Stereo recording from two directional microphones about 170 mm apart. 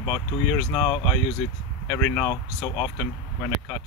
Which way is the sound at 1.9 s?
10° left (ahead or behind).